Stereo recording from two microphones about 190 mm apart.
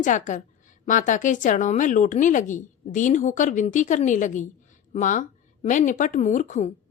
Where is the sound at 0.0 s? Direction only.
40° left (ahead or behind).